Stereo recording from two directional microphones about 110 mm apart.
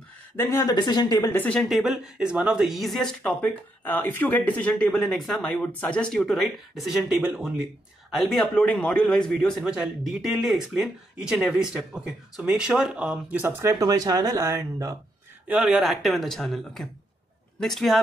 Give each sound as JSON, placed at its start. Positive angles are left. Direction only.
{"t": 0.6, "sound": "speech", "side_deg": 40}
{"t": 1.3, "sound": "speech", "side_deg": 10}
{"t": 1.7, "sound": "a man's voice", "side_deg": 0}
{"t": 3.2, "sound": "a man's voice", "side_deg": 15}
{"t": 9.7, "sound": "speech", "side_deg": -5}
{"t": 15.4, "sound": "a man's voice", "side_deg": -10}